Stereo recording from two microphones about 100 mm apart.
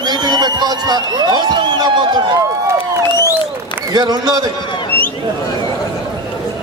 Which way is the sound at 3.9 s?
45° right (ahead or behind).